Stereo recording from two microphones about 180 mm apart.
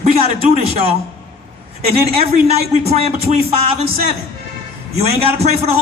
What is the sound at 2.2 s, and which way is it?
Music, 35° right (ahead or behind).